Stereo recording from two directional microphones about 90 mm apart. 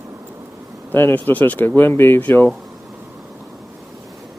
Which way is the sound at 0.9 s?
20° left (ahead or behind).